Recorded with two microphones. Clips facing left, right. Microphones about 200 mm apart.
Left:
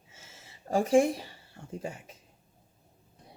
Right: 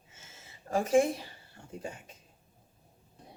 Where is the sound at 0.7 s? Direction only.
30° left (ahead or behind).